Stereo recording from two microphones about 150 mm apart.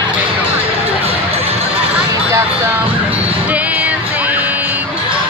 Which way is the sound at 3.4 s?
10° right (ahead or behind).